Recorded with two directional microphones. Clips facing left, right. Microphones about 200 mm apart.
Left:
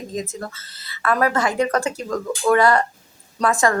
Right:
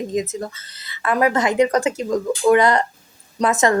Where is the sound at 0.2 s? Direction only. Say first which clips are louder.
Right 4 dB; 20° right (ahead or behind).